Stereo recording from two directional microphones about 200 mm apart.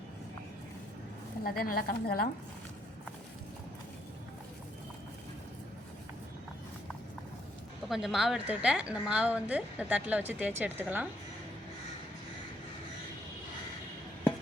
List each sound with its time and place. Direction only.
1.5 s a woman's voice: 50° left (ahead or behind)
7.9 s a woman's voice: centre (ahead or behind)